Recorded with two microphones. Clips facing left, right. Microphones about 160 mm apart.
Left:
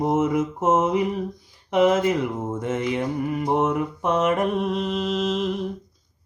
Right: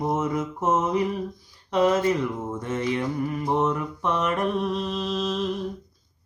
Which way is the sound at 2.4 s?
20° left (ahead or behind).